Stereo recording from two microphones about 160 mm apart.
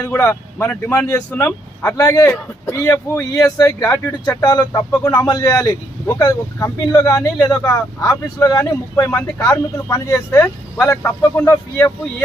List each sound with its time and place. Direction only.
0.0 s speech: 15° left (ahead or behind)